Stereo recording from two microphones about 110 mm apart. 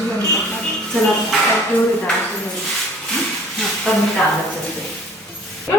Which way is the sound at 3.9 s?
10° left (ahead or behind).